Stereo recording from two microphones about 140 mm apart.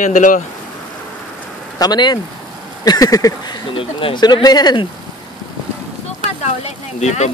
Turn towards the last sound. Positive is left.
turn(degrees=55)  # may be behind; listen again after turning